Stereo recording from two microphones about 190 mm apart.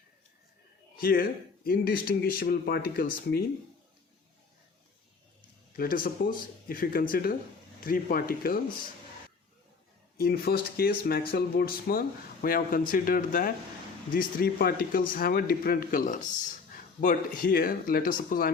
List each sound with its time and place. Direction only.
0.9 s speech: 50° left (ahead or behind)
5.7 s speech: 50° left (ahead or behind)
10.2 s speech: 55° left (ahead or behind)